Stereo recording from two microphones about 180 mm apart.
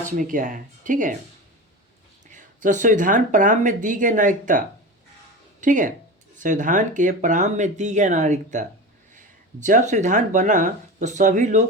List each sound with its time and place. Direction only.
0.0 s speech: 45° right (ahead or behind)
2.2 s speech: 45° right (ahead or behind)